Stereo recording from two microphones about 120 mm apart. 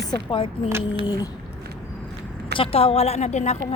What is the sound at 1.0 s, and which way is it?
Speech, 35° left (ahead or behind).